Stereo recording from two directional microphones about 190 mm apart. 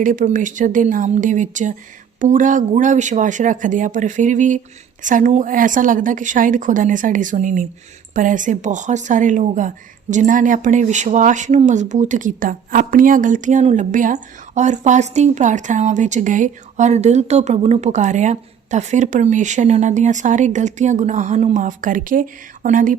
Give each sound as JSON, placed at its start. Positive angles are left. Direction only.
{"t": 0.0, "sound": "a woman's voice", "side_deg": -45}